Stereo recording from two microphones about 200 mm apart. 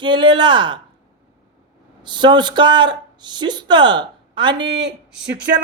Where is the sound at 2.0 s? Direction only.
25° right (ahead or behind).